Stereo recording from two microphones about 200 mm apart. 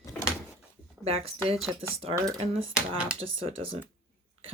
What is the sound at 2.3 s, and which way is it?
Speech, 30° right (ahead or behind).